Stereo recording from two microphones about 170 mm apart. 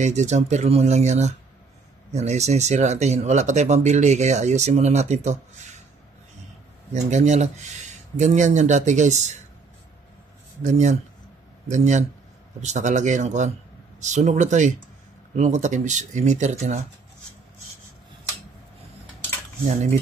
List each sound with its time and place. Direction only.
0.0 s speech: 45° right (ahead or behind)
6.9 s speech: 45° right (ahead or behind)
10.6 s speech: 45° right (ahead or behind)